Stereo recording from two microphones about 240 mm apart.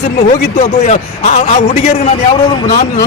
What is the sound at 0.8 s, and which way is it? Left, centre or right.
A man's voice, left.